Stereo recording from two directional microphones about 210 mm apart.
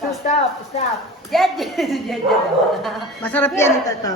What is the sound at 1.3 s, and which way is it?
A woman's voice, centre (ahead or behind).